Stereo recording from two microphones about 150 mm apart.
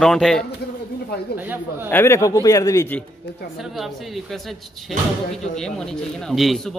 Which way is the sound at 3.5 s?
Centre (ahead or behind).